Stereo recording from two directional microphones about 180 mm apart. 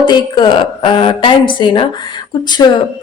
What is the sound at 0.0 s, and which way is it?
A woman's voice, 25° left (ahead or behind).